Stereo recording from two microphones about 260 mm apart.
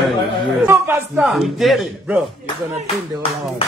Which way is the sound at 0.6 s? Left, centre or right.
Centre.